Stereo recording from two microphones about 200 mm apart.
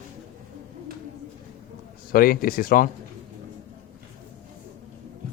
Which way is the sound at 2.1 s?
45° left (ahead or behind).